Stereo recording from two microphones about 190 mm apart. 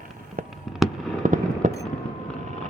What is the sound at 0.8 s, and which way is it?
Fireworks, centre (ahead or behind).